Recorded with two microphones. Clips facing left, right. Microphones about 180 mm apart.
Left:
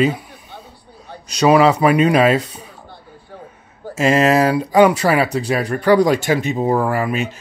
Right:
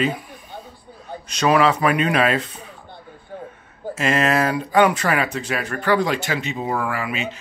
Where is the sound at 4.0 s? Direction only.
35° left (ahead or behind).